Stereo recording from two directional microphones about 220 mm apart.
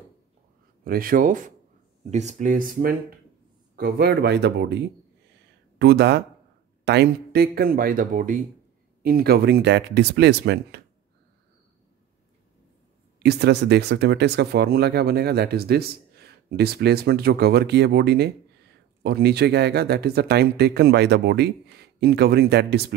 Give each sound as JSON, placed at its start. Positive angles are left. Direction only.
{"t": 0.8, "sound": "speech", "side_deg": -40}
{"t": 13.2, "sound": "speech", "side_deg": -50}